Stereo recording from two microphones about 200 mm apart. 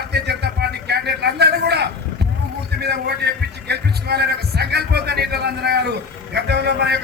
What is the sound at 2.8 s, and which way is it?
A man's voice, 55° right (ahead or behind).